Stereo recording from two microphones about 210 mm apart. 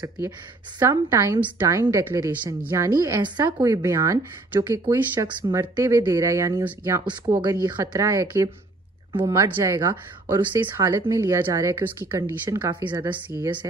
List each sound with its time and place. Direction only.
0.7 s a woman's voice: 10° right (ahead or behind)
7.1 s a woman's voice: 20° right (ahead or behind)